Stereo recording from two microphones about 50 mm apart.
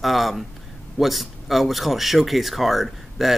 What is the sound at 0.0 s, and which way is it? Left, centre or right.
Speech, centre.